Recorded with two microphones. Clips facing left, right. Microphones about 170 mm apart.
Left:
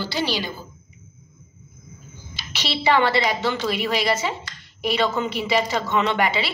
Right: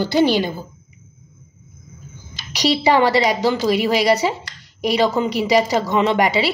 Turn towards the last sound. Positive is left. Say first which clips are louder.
# right 5 dB
turn(degrees=-40)  # may be behind; listen again after turning